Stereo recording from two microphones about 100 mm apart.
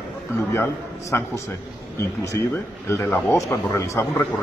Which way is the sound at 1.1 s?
25° left (ahead or behind).